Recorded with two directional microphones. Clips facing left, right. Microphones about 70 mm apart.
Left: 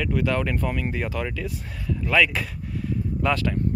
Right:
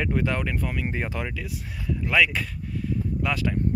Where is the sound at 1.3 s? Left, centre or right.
Centre.